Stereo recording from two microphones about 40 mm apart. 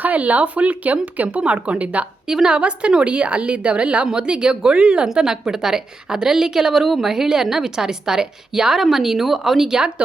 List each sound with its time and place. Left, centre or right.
0.0 s speech: right
2.2 s a woman's voice: centre
5.0 s a woman's voice: centre